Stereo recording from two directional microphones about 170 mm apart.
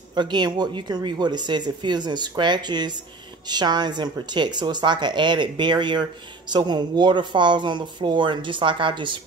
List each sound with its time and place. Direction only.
0.1 s speech: 25° right (ahead or behind)